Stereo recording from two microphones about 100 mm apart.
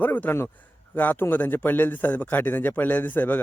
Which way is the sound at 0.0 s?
20° left (ahead or behind).